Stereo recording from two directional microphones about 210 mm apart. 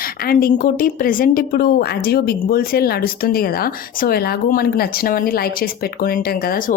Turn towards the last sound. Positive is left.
turn(degrees=45)  # may be behind; listen again after turning